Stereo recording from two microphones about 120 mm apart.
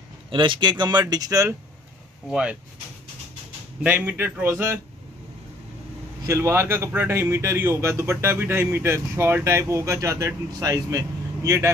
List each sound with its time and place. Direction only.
0.3 s speech: 40° right (ahead or behind)
2.2 s speech: 5° right (ahead or behind)
3.8 s speech: 15° right (ahead or behind)
6.2 s speech: 25° right (ahead or behind)